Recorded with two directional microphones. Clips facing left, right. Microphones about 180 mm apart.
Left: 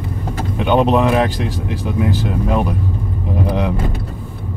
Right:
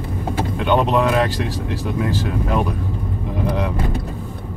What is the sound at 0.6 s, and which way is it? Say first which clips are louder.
Speech: left 4 dB; 15° left (ahead or behind).